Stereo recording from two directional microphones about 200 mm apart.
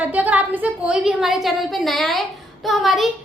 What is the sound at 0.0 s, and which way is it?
A woman's voice, 5° right (ahead or behind).